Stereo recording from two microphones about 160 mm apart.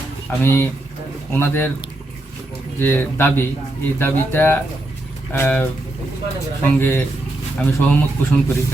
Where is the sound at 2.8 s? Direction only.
15° left (ahead or behind).